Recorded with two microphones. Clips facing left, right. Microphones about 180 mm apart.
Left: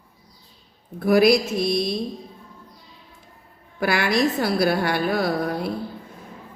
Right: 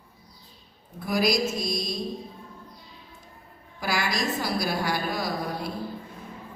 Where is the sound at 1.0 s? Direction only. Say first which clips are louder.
Left 8 dB; 60° left (ahead or behind).